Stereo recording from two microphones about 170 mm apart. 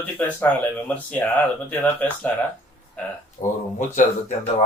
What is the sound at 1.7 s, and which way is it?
Speech, 10° left (ahead or behind).